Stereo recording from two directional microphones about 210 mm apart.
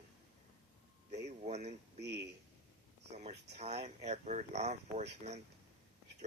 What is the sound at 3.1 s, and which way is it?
Speech, 30° right (ahead or behind).